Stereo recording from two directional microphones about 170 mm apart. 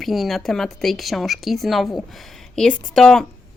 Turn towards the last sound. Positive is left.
turn(degrees=5)  # may be behind; listen again after turning